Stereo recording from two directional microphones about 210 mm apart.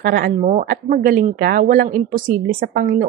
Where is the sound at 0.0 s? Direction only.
45° right (ahead or behind).